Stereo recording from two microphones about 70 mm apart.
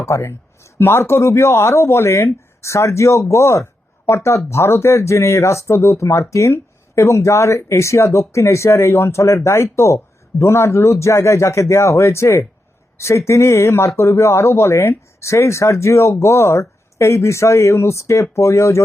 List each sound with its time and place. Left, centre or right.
0.0 s speech: left